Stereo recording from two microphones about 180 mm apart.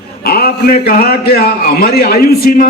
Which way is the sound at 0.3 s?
55° left (ahead or behind).